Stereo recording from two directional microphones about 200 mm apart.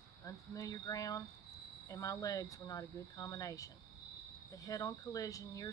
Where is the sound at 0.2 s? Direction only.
15° left (ahead or behind).